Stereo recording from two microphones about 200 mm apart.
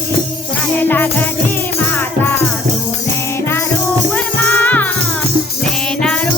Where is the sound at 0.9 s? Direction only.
10° left (ahead or behind).